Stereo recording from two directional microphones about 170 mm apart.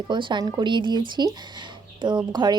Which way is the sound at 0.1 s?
30° right (ahead or behind).